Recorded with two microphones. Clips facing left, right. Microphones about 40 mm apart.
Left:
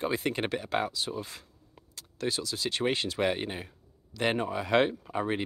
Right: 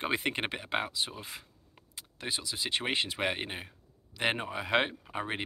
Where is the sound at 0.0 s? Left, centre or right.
Right.